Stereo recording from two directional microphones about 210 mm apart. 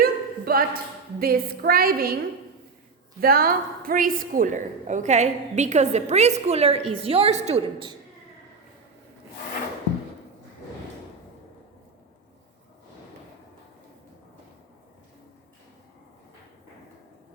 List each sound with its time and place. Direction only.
0.0 s a sound: 45° right (ahead or behind)
1.2 s a woman's voice: 45° right (ahead or behind)
3.2 s a woman's voice: 45° right (ahead or behind); by 7.9 s 25° right (ahead or behind)